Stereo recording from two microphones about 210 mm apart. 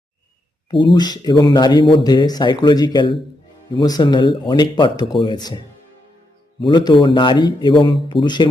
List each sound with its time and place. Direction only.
0.9 s speech: 20° left (ahead or behind)